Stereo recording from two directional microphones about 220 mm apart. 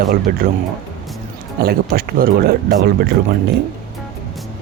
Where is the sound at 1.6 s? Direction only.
45° right (ahead or behind).